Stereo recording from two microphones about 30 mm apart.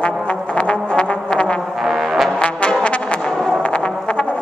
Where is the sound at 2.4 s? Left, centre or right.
Left.